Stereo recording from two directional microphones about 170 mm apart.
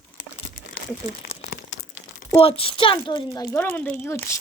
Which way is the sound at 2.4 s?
35° left (ahead or behind).